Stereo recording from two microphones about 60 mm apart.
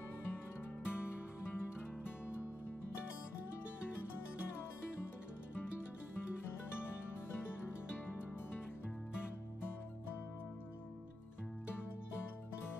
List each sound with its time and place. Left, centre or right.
0.8 s music: left